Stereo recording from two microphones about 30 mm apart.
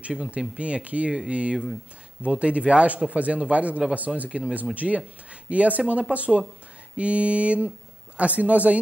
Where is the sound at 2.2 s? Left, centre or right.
Right.